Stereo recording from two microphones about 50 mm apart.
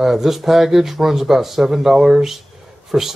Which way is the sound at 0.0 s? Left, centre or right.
Centre.